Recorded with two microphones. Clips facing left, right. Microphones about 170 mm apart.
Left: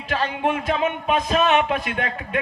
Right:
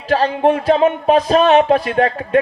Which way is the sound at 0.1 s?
35° right (ahead or behind).